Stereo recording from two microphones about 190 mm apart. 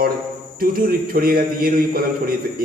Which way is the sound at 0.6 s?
50° right (ahead or behind).